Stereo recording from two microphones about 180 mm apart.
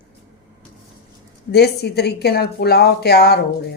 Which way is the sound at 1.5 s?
65° left (ahead or behind).